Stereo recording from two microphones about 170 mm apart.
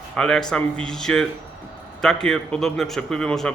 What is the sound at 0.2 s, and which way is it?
Speech, 5° left (ahead or behind).